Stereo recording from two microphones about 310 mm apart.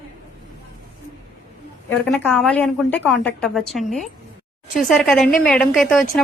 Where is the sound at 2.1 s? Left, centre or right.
Centre.